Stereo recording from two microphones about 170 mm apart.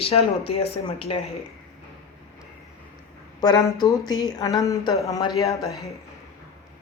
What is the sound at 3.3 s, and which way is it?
A woman's voice, 25° left (ahead or behind).